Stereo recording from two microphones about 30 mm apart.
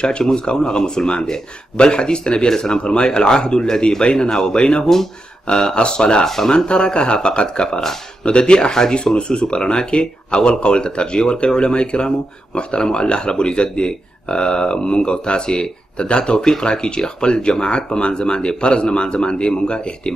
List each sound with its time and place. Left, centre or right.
0.2 s speech: left
6.2 s speech: centre
6.5 s speech: left